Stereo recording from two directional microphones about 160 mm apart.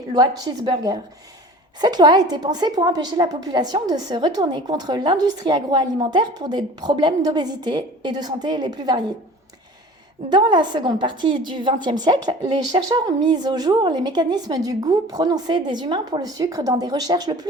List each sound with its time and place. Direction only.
0.1 s a woman's voice: 25° right (ahead or behind)
10.2 s a woman's voice: 30° right (ahead or behind)